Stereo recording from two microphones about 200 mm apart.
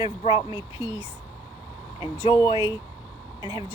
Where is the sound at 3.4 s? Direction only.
20° right (ahead or behind).